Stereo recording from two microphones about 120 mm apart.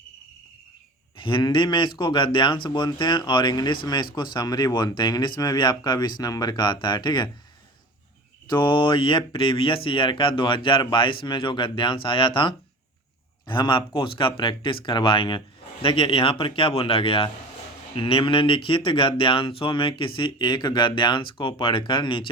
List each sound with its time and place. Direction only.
1.1 s speech: 45° left (ahead or behind)
8.4 s speech: 40° left (ahead or behind)